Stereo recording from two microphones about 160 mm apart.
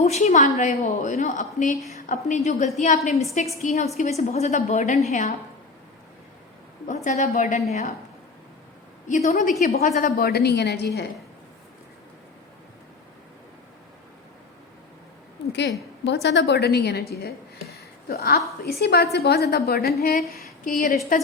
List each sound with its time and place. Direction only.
0.0 s a woman's voice: 45° left (ahead or behind)
6.8 s a woman's voice: 45° left (ahead or behind)
9.0 s a woman's voice: 45° left (ahead or behind)
9.6 s a woman's voice: 60° left (ahead or behind); by 11.1 s 90° left
15.5 s a woman's voice: 90° left; by 20.1 s 75° left (ahead or behind)
20.3 s a sound: 60° left (ahead or behind)